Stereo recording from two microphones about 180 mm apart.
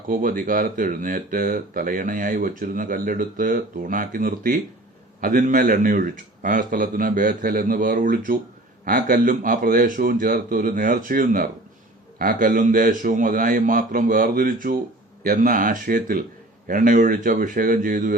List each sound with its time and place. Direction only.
0.1 s speech: 50° right (ahead or behind)